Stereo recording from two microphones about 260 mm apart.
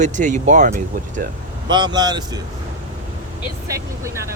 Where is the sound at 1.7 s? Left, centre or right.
Centre.